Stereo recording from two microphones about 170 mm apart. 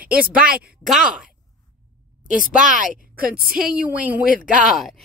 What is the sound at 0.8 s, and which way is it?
Speech, 5° right (ahead or behind).